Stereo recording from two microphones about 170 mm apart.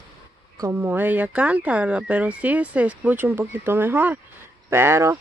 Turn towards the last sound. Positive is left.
turn(degrees=-15)  # may be behind; listen again after turning